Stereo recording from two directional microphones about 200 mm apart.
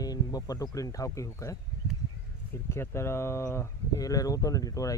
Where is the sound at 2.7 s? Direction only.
15° left (ahead or behind).